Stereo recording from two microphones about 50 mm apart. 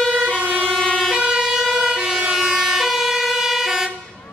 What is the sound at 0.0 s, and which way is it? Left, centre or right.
Emergency vehicle, centre.